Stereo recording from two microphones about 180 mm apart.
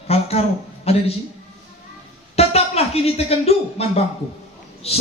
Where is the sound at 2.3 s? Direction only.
35° left (ahead or behind).